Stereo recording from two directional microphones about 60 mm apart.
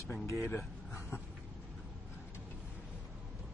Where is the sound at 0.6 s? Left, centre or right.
Left.